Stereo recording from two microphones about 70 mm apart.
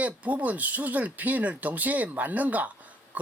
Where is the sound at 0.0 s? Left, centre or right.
Right.